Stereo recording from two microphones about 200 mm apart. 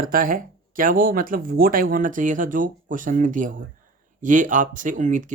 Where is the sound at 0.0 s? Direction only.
45° right (ahead or behind).